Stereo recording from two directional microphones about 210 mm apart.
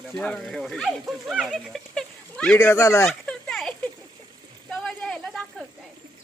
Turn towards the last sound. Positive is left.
turn(degrees=0)  # may be behind; listen again after turning